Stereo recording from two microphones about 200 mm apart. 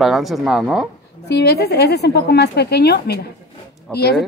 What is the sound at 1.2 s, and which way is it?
Female singing, 55° left (ahead or behind).